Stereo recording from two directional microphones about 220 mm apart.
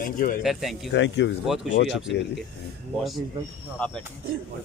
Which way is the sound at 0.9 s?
55° left (ahead or behind).